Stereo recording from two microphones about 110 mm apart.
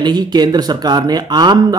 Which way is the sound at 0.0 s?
40° right (ahead or behind).